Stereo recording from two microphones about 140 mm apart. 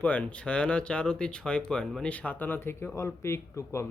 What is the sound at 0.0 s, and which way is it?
Speech, 10° left (ahead or behind).